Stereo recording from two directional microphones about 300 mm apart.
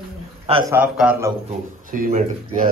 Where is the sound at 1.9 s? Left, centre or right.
Right.